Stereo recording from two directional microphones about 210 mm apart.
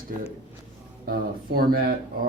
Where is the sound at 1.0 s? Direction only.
45° right (ahead or behind).